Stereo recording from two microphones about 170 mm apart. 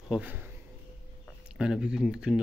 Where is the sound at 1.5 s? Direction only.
5° right (ahead or behind).